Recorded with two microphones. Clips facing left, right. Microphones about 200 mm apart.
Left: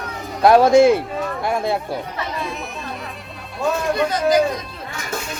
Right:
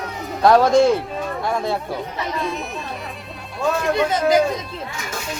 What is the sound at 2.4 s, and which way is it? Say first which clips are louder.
Speech: right 2 dB; centre (ahead or behind).